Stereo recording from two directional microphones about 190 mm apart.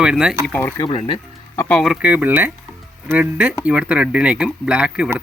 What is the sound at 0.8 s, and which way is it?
Speech, 30° left (ahead or behind).